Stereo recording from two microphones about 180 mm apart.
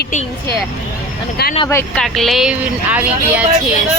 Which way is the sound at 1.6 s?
15° left (ahead or behind).